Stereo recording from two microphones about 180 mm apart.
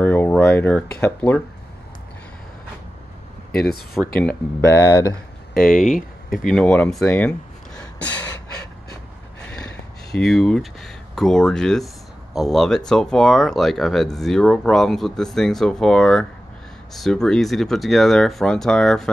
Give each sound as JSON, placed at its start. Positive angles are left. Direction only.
{"t": 0.0, "sound": "a sound", "side_deg": 10}
{"t": 1.0, "sound": "speech", "side_deg": 10}
{"t": 4.2, "sound": "speech", "side_deg": 10}
{"t": 5.5, "sound": "speech", "side_deg": 50}
{"t": 5.8, "sound": "speech", "side_deg": 0}
{"t": 10.1, "sound": "speech", "side_deg": 0}